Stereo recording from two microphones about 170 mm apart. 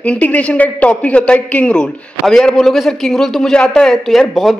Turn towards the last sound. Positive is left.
turn(degrees=0)  # may be behind; listen again after turning